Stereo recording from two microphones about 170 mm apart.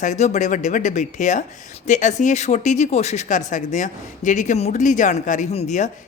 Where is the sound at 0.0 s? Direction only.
45° left (ahead or behind).